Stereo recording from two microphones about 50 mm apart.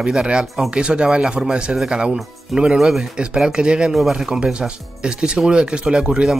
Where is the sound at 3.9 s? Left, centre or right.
Centre.